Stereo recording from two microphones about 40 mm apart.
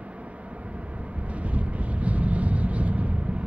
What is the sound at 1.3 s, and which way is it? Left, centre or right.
Vehicle, right.